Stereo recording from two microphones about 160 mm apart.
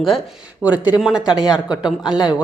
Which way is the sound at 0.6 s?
10° right (ahead or behind).